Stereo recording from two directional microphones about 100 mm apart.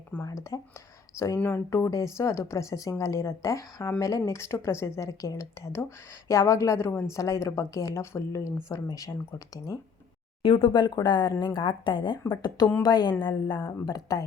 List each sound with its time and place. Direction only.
0.2 s a woman's voice: 35° left (ahead or behind)
10.4 s speech: 60° left (ahead or behind)
12.3 s speech: 45° left (ahead or behind)
13.8 s a woman's voice: 40° left (ahead or behind)